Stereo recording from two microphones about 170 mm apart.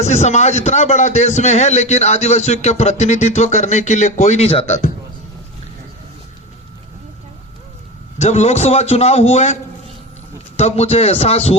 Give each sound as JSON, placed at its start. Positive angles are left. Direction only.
{"t": 0.0, "sound": "a man's voice", "side_deg": 40}
{"t": 8.2, "sound": "a man's voice", "side_deg": 40}
{"t": 10.6, "sound": "a man's voice", "side_deg": 40}